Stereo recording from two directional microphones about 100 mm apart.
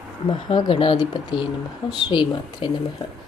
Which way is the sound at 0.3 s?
60° left (ahead or behind).